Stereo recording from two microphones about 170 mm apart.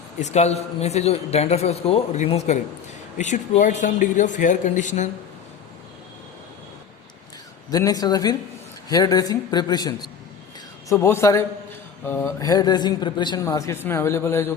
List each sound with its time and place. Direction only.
0.2 s a man's voice: 40° left (ahead or behind)
7.7 s a man's voice: 20° left (ahead or behind)
10.9 s a man's voice: 15° left (ahead or behind)